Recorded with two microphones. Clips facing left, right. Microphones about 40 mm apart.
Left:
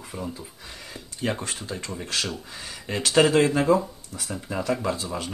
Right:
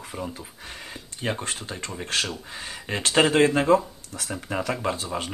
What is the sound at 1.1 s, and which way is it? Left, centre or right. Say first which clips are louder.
Speech: left 1 dB; centre.